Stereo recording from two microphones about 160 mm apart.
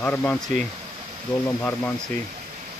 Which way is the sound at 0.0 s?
10° left (ahead or behind).